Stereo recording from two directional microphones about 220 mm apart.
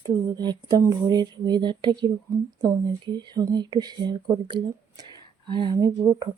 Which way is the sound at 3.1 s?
20° right (ahead or behind).